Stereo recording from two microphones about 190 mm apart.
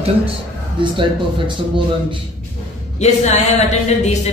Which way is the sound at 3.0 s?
35° left (ahead or behind).